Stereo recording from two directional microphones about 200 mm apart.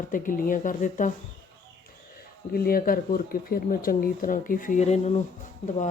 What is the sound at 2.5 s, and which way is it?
Speech, 50° left (ahead or behind).